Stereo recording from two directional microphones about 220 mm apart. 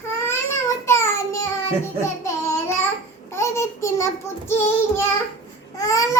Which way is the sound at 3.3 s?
10° left (ahead or behind).